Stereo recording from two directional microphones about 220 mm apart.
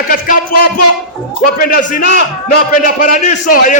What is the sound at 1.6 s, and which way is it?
Speech, 40° left (ahead or behind).